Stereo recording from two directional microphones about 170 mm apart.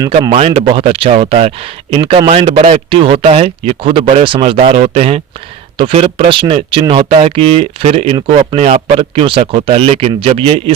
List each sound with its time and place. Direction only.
0.3 s speech: 35° right (ahead or behind)